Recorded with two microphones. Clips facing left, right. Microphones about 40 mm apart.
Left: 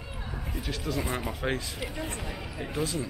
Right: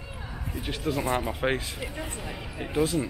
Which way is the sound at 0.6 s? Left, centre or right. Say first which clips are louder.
Right 3 dB; right.